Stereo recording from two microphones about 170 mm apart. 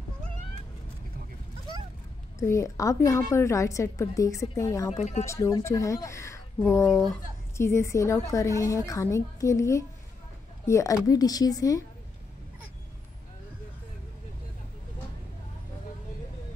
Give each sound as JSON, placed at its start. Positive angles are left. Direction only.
{"t": 2.3, "sound": "a woman's voice", "side_deg": 15}
{"t": 4.9, "sound": "speech", "side_deg": 40}
{"t": 5.2, "sound": "a woman's voice", "side_deg": 20}
{"t": 7.5, "sound": "a woman's voice", "side_deg": 15}